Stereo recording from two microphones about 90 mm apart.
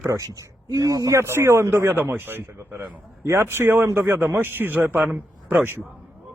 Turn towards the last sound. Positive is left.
turn(degrees=-20)  # may be behind; listen again after turning